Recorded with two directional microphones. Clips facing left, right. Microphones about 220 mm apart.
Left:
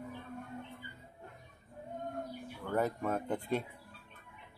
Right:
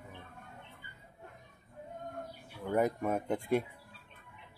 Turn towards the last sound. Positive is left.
turn(degrees=-10)  # may be behind; listen again after turning